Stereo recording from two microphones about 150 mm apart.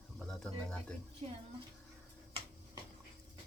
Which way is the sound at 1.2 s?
50° right (ahead or behind).